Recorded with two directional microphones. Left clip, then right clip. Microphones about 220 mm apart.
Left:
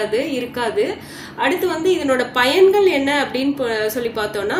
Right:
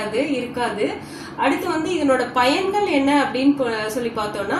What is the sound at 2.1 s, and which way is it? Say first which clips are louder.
A woman's voice: right 2 dB; 50° left (ahead or behind).